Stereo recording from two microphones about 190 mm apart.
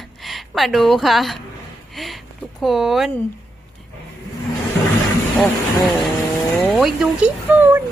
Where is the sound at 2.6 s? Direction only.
Centre (ahead or behind).